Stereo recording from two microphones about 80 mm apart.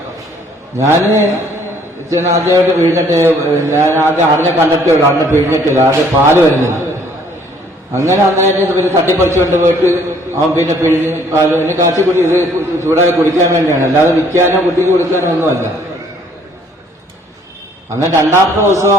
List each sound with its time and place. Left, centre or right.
0.8 s a man's voice: right
3.8 s speech: left
4.5 s a man's voice: right
7.9 s a man's voice: right
18.2 s a man's voice: right